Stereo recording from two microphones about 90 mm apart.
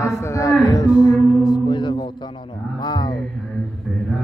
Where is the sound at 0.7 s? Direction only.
40° left (ahead or behind); by 2.1 s 60° left (ahead or behind).